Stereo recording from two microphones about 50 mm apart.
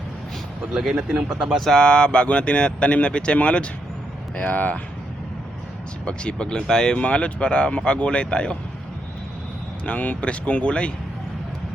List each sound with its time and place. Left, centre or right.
0.7 s speech: centre
0.9 s speech: centre
1.7 s speech: centre
6.1 s speech: centre
9.8 s speech: left